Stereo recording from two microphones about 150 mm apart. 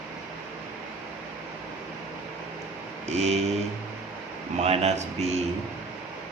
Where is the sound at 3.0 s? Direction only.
45° right (ahead or behind).